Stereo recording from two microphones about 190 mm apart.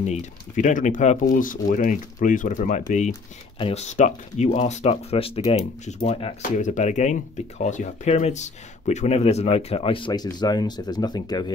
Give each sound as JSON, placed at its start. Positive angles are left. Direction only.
{"t": 0.0, "sound": "speech", "side_deg": 35}